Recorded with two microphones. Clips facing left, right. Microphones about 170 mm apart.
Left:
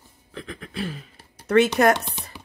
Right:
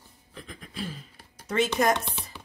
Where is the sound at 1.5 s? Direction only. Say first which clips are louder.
Left 7 dB; 65° left (ahead or behind).